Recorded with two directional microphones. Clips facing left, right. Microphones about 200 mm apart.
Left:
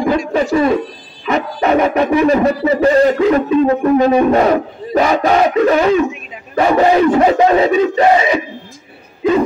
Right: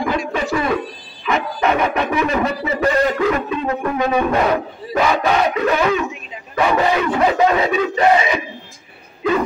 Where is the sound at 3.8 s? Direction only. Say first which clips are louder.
Left 7 dB; 35° left (ahead or behind).